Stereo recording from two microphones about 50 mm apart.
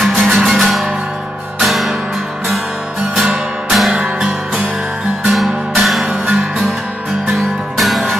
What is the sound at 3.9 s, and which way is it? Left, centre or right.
Music, centre.